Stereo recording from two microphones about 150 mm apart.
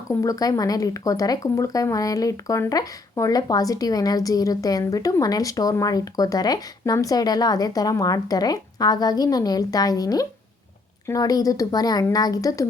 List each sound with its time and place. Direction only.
0.1 s speech: 20° left (ahead or behind)